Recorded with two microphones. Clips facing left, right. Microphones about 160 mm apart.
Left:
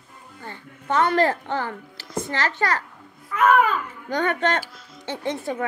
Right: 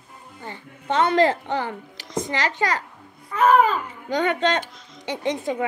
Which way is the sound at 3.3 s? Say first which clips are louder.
Right 1 dB; 30° right (ahead or behind).